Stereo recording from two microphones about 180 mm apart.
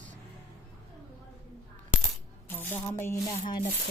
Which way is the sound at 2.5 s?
10° left (ahead or behind).